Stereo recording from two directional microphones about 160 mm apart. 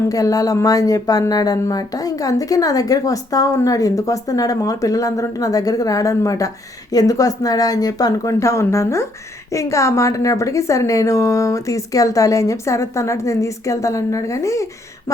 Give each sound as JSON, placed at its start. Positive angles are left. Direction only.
{"t": 0.1, "sound": "speech", "side_deg": 20}